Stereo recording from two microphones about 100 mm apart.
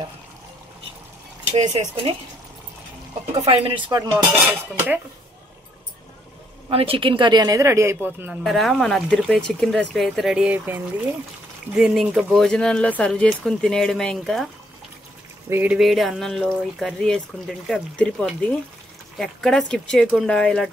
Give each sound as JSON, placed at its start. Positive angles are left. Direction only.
{"t": 1.5, "sound": "speech", "side_deg": -90}
{"t": 3.3, "sound": "speech", "side_deg": -75}
{"t": 3.9, "sound": "dishes", "side_deg": -40}
{"t": 4.5, "sound": "speech", "side_deg": -20}
{"t": 6.7, "sound": "speech", "side_deg": -70}
{"t": 8.0, "sound": "speech", "side_deg": -15}
{"t": 8.5, "sound": "speech", "side_deg": 0}
{"t": 11.7, "sound": "speech", "side_deg": -5}
{"t": 15.5, "sound": "speech", "side_deg": -15}
{"t": 15.8, "sound": "speech", "side_deg": 0}